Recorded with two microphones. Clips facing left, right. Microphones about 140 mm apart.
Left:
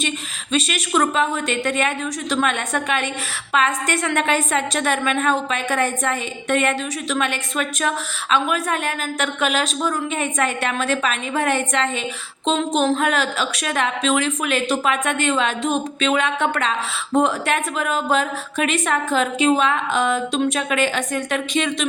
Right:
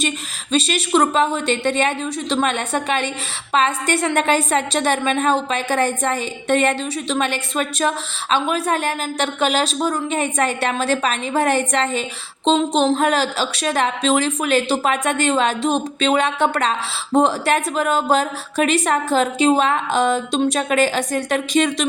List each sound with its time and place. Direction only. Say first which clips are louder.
0.5 s a woman's voice: right 3 dB; 30° right (ahead or behind)